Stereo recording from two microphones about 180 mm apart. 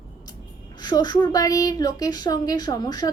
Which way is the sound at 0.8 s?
25° left (ahead or behind).